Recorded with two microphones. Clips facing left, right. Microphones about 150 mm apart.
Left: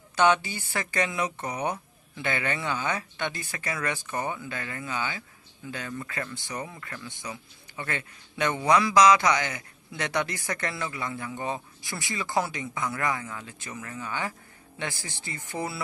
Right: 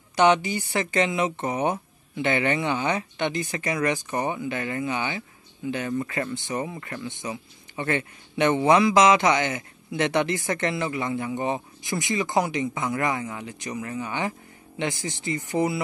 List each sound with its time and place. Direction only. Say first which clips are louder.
0.1 s speech: right 3 dB; 15° right (ahead or behind)